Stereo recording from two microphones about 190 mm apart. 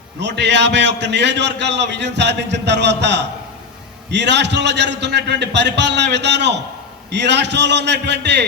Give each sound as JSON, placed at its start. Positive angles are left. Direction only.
{"t": 0.2, "sound": "a man's voice", "side_deg": -65}